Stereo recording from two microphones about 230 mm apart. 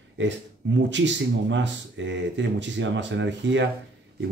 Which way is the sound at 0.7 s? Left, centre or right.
Right.